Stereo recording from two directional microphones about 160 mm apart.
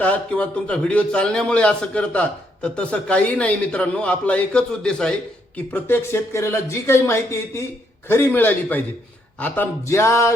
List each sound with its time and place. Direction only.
0.0 s a man's voice: 10° left (ahead or behind)